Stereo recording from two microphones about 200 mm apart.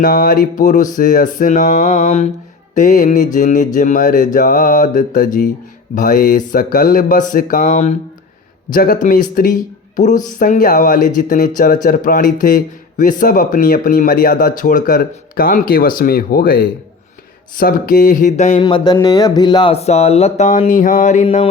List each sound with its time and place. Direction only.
0.0 s speech: 45° left (ahead or behind)
18.6 s speech: 20° left (ahead or behind); by 21.4 s 35° left (ahead or behind)